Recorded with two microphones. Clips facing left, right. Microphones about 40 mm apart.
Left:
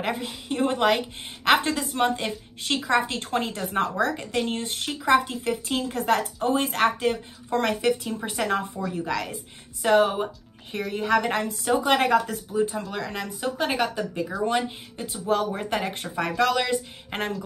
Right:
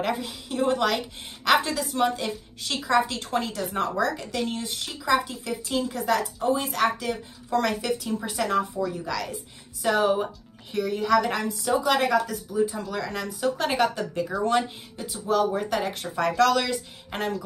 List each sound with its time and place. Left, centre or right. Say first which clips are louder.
0.2 s a woman's voice: left 1 dB; left
12.9 s speech: right 1 dB; left
13.6 s speech: left 1 dB; centre
15.2 s speech: right 1 dB; left
16.2 s speech: right 2 dB; centre